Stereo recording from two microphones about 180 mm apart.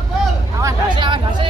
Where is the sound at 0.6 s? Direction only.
25° right (ahead or behind).